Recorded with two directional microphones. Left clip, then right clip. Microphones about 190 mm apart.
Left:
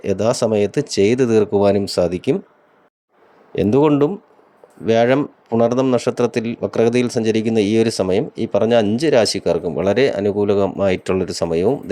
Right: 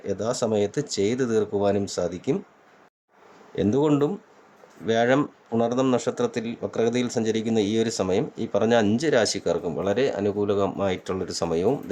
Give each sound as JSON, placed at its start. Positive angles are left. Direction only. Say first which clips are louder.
{"t": 0.0, "sound": "speech", "louder": "left 9 dB", "side_deg": 30}
{"t": 3.5, "sound": "speech", "louder": "left 7 dB", "side_deg": 30}